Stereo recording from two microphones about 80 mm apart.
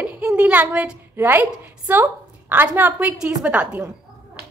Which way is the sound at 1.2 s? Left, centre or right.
Right.